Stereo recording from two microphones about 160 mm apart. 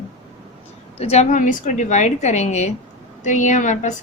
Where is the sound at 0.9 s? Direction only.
40° left (ahead or behind).